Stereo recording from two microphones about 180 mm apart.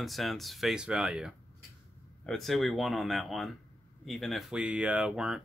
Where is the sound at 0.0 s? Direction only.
Centre (ahead or behind).